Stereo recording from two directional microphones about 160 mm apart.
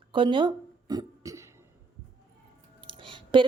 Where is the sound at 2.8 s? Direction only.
30° right (ahead or behind).